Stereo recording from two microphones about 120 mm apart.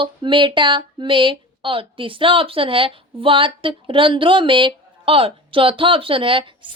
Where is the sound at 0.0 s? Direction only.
40° right (ahead or behind).